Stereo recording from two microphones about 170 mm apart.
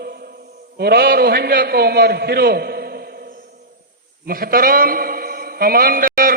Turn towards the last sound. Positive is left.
turn(degrees=-55)  # may be behind; listen again after turning